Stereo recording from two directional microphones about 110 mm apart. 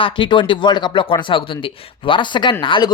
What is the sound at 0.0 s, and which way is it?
Speech, 50° left (ahead or behind).